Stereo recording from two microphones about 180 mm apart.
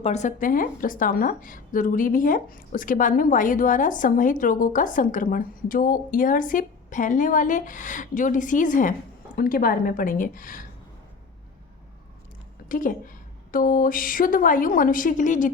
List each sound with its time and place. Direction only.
0.0 s speech: 40° left (ahead or behind)
12.6 s speech: 50° left (ahead or behind)